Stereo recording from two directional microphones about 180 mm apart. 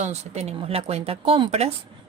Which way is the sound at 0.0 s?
35° right (ahead or behind).